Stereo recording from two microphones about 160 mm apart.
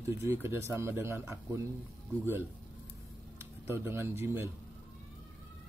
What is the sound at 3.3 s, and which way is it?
Speech, 15° right (ahead or behind).